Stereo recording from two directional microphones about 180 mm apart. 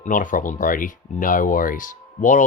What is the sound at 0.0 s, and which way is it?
Speech, 45° left (ahead or behind).